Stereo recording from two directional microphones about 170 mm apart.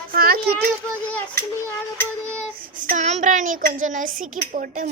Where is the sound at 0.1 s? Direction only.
60° right (ahead or behind).